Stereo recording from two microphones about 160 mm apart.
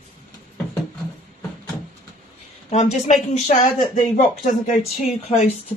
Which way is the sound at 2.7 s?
45° left (ahead or behind).